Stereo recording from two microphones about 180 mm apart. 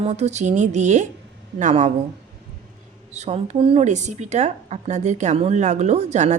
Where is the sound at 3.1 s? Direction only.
35° right (ahead or behind).